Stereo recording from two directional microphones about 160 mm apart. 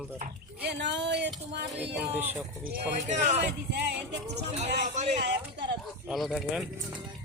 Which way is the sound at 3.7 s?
90° right.